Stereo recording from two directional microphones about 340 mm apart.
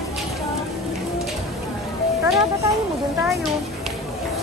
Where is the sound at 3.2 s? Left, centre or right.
Centre.